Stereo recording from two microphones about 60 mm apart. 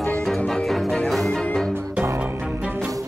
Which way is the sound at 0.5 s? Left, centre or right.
Centre.